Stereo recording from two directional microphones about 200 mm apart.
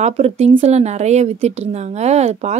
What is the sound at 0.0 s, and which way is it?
A woman's voice, 30° right (ahead or behind).